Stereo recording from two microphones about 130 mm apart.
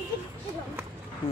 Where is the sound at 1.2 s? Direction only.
45° left (ahead or behind).